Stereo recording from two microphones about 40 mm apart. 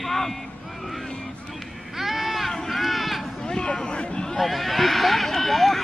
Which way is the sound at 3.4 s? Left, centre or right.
Left.